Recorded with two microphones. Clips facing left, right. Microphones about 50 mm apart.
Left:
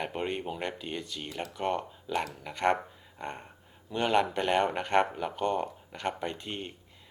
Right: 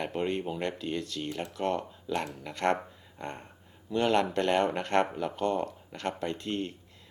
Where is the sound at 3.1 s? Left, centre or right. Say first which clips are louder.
Even; centre.